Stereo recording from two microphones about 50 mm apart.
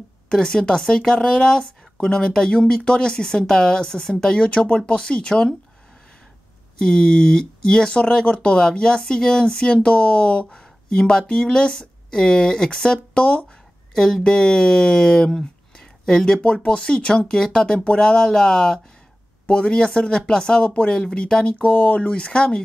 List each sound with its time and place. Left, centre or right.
0.3 s speech: centre
6.8 s speech: centre
16.3 s speech: left
21.5 s speech: left